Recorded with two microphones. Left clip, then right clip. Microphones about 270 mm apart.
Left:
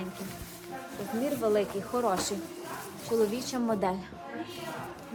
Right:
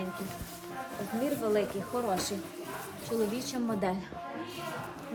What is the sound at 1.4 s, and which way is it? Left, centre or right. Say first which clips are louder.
Speech: left 4 dB; centre.